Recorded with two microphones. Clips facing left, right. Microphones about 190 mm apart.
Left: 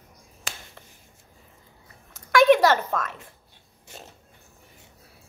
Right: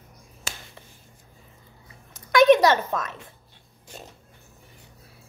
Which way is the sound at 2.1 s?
20° right (ahead or behind).